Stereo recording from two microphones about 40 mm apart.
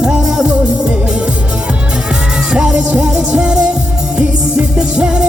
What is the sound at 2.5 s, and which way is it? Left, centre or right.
Music, right.